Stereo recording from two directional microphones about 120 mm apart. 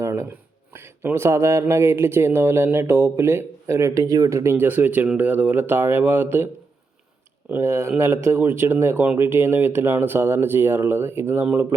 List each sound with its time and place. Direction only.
0.0 s speech: 20° right (ahead or behind)
7.5 s speech: 20° right (ahead or behind)